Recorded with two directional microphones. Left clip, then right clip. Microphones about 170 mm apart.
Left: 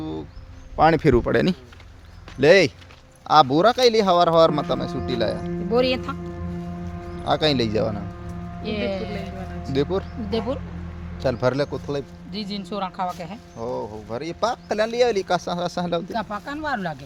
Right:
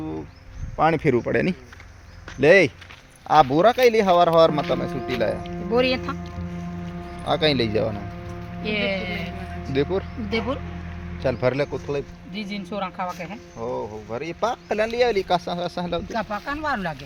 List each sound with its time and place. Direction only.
0.8 s speech: 35° left (ahead or behind)
2.4 s a man's voice: 10° left (ahead or behind)
3.2 s a man's voice: centre (ahead or behind)
7.3 s a man's voice: 10° left (ahead or behind)
12.3 s speech: 35° left (ahead or behind)
13.6 s speech: centre (ahead or behind); by 15.4 s 20° left (ahead or behind)
15.4 s speech: 30° left (ahead or behind)
16.0 s speech: centre (ahead or behind)